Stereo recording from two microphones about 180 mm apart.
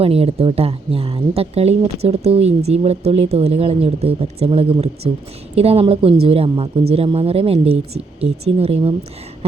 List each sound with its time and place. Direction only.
0.0 s a woman's voice: 30° right (ahead or behind)